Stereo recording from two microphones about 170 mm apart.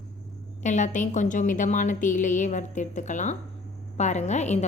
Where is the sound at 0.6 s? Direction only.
45° left (ahead or behind).